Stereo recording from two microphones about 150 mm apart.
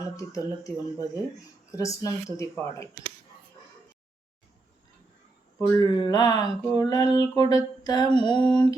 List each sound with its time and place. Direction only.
0.0 s speech: 20° left (ahead or behind)
5.5 s speech: 20° left (ahead or behind)
7.5 s a sound: 25° left (ahead or behind)
8.1 s speech: 30° left (ahead or behind)